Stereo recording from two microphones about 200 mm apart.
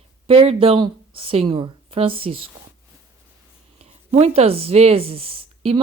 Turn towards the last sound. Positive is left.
turn(degrees=-30)  # may be behind; listen again after turning